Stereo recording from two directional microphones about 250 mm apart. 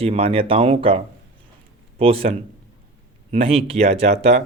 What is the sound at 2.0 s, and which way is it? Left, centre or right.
Speech, right.